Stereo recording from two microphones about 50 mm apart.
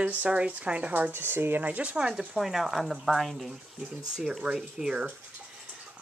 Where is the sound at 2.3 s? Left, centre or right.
Centre.